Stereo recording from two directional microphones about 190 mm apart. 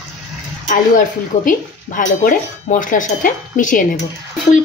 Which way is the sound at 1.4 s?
45° left (ahead or behind).